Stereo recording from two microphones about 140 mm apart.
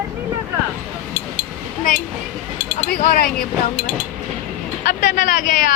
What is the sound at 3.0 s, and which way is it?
Speech, 85° left.